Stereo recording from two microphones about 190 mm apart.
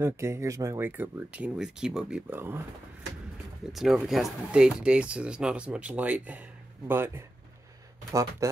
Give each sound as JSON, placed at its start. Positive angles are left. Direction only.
{"t": 0.0, "sound": "speech", "side_deg": -15}
{"t": 3.7, "sound": "speech", "side_deg": 0}